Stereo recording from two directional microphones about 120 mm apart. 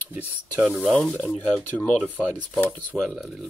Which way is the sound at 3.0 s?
Centre (ahead or behind).